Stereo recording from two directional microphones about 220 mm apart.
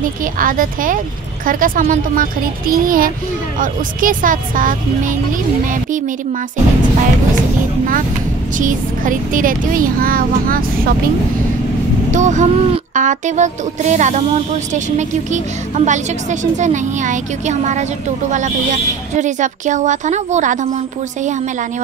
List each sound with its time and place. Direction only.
0.2 s a woman's voice: 40° right (ahead or behind)
8.5 s a woman's voice: 35° right (ahead or behind)
12.1 s a woman's voice: 35° right (ahead or behind)